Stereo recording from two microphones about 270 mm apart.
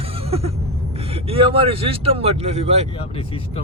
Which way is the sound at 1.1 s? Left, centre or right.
Right.